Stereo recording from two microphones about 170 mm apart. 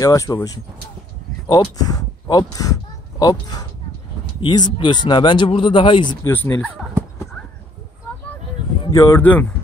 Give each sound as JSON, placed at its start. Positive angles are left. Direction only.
{"t": 0.0, "sound": "speech", "side_deg": 20}
{"t": 1.5, "sound": "speech", "side_deg": 20}
{"t": 6.2, "sound": "speech", "side_deg": 15}
{"t": 8.9, "sound": "speech", "side_deg": 20}